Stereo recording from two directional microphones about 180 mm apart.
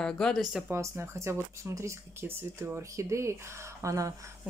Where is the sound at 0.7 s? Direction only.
15° right (ahead or behind).